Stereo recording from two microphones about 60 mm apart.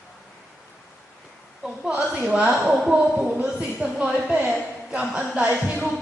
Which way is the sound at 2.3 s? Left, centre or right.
Centre.